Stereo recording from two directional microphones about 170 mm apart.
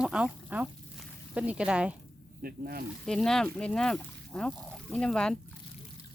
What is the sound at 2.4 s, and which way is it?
Speech, 60° right (ahead or behind).